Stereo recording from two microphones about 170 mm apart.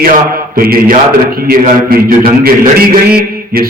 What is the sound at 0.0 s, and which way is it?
A man's voice, 55° right (ahead or behind).